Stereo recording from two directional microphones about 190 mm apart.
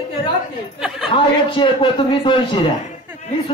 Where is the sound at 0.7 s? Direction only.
Centre (ahead or behind).